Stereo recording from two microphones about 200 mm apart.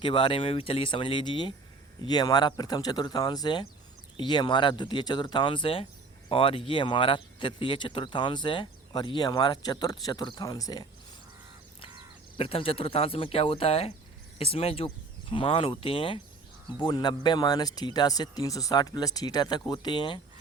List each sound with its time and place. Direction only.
0.0 s speech: 25° left (ahead or behind)
12.4 s speech: 25° left (ahead or behind)